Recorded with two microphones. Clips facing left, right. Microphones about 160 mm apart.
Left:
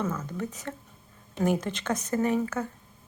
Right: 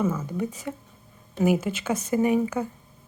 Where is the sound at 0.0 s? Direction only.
10° right (ahead or behind).